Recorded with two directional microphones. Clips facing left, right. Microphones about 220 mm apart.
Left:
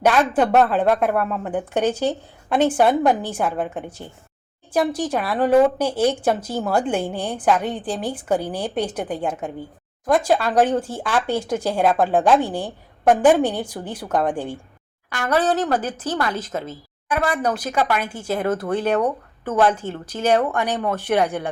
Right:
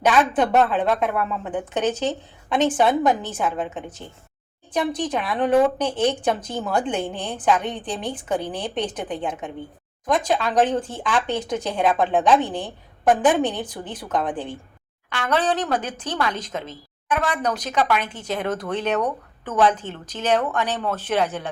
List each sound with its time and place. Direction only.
0.3 s speech: 5° left (ahead or behind)
0.9 s speech: 50° left (ahead or behind)
1.5 s speech: 10° left (ahead or behind)